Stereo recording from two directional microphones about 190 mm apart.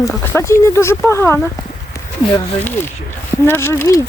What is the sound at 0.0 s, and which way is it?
Speech, 15° left (ahead or behind).